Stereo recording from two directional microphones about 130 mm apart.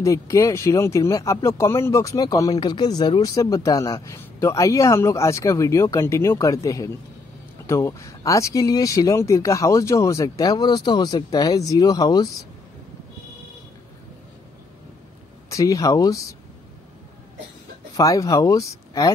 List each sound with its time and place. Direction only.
0.0 s speech: 25° left (ahead or behind)
15.5 s speech: 25° left (ahead or behind)
17.9 s speech: 25° left (ahead or behind)